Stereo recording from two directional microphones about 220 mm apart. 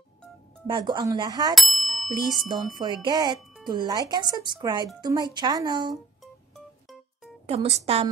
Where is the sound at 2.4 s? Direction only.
20° right (ahead or behind).